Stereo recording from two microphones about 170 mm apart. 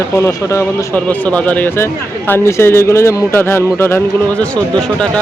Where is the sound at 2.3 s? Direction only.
15° left (ahead or behind).